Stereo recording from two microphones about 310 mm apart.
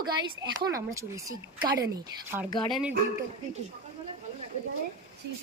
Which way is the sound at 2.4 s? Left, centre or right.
Centre.